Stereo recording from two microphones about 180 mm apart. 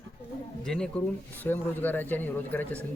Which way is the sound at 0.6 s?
5° left (ahead or behind).